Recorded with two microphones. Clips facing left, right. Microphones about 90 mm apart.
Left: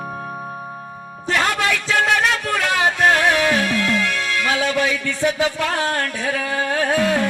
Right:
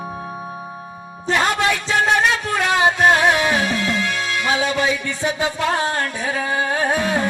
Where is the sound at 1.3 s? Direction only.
20° right (ahead or behind).